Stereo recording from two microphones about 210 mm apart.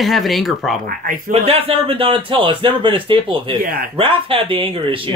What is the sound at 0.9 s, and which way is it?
Speech, 40° right (ahead or behind).